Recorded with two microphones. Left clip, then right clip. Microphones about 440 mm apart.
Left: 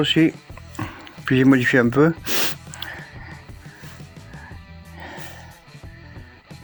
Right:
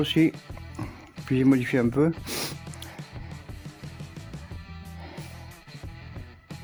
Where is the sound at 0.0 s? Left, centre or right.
Right.